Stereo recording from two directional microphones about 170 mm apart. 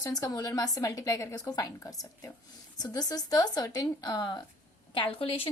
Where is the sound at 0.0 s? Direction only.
20° left (ahead or behind).